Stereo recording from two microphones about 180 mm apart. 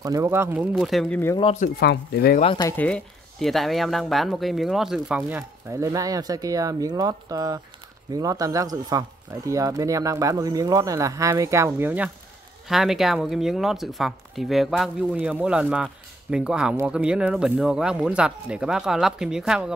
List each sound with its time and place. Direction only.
0.0 s speech: 20° right (ahead or behind); by 1.2 s centre (ahead or behind)
1.4 s speech: 40° left (ahead or behind)
1.8 s speech: 60° left (ahead or behind)
2.4 s speech: 25° left (ahead or behind)
2.8 s speech: 5° left (ahead or behind)
5.7 s speech: 15° right (ahead or behind)